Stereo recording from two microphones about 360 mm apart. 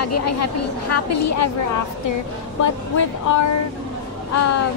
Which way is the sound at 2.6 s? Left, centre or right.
Left.